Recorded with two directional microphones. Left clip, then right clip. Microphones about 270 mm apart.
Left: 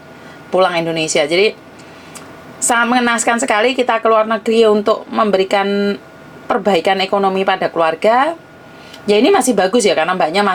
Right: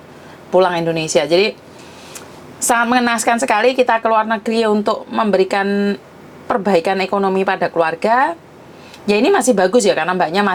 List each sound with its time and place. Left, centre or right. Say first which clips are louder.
0.5 s a woman's voice: even; right
2.6 s a woman's voice: left 1 dB; right